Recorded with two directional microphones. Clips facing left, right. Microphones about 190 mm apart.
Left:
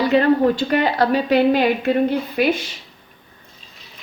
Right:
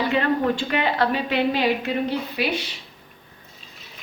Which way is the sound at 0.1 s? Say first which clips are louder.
Left 6 dB; 40° left (ahead or behind).